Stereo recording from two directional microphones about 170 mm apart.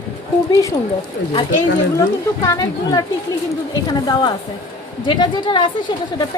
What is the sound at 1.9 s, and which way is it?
A woman's voice, 20° left (ahead or behind).